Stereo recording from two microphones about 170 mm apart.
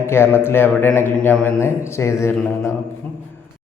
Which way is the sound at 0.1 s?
15° left (ahead or behind).